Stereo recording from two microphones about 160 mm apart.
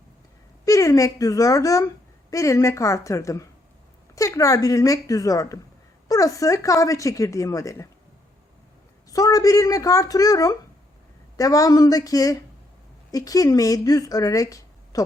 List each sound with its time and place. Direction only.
0.6 s speech: 20° left (ahead or behind)
9.0 s speech: 20° left (ahead or behind)